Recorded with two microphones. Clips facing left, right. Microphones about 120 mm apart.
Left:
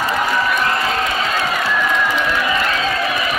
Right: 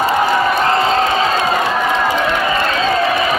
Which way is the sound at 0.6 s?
30° right (ahead or behind).